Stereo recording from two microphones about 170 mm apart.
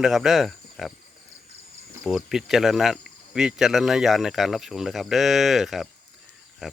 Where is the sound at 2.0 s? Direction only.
Centre (ahead or behind).